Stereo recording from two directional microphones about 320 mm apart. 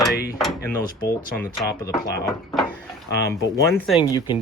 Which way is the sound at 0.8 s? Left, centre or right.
Left.